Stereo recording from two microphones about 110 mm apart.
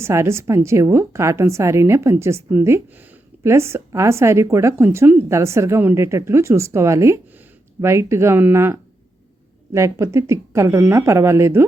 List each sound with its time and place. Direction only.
0.0 s a woman's voice: 25° right (ahead or behind)